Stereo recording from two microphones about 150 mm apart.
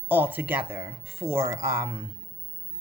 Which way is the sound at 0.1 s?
10° right (ahead or behind).